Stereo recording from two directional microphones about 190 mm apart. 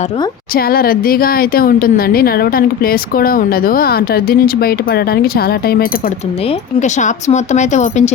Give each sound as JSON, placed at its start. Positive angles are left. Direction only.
{"t": 0.5, "sound": "speech", "side_deg": 50}
{"t": 6.7, "sound": "speech", "side_deg": 40}